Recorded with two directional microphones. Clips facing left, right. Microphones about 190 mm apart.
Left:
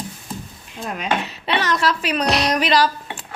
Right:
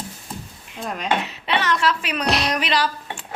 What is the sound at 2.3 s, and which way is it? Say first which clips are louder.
Speech: left 1 dB; centre (ahead or behind).